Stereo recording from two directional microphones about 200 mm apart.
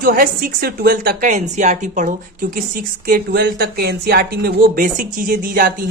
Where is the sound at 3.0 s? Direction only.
50° right (ahead or behind).